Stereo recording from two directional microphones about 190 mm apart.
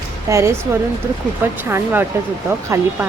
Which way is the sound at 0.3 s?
15° right (ahead or behind).